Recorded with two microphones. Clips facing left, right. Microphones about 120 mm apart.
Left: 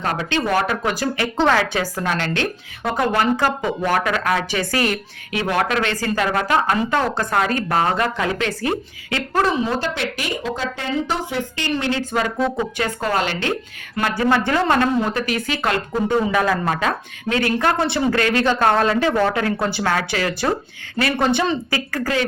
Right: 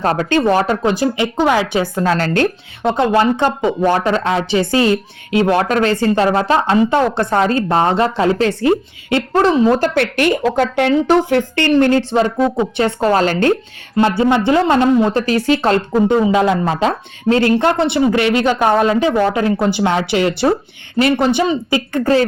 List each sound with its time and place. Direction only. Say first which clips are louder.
0.0 s speech: right 7 dB; 40° right (ahead or behind)
0.4 s speech: right 4 dB; 30° right (ahead or behind)
2.1 s speech: right 8 dB; 45° right (ahead or behind)
2.8 s speech: right 6 dB; 25° right (ahead or behind)
9.6 s a woman's voice: right 9 dB; 50° right (ahead or behind)
12.1 s a woman's voice: right 6 dB; 25° right (ahead or behind); by 13.5 s 45° right (ahead or behind)
13.9 s speech: right 6 dB; 25° right (ahead or behind)
16.0 s speech: right 4 dB; 20° right (ahead or behind)